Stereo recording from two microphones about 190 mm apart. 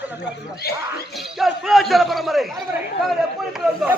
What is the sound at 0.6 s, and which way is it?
Speech, 55° left (ahead or behind).